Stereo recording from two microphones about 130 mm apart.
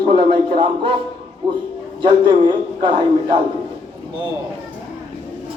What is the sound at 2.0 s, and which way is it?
A man's voice, 40° right (ahead or behind).